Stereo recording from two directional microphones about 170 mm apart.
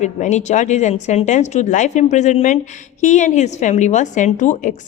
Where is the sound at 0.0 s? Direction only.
45° left (ahead or behind).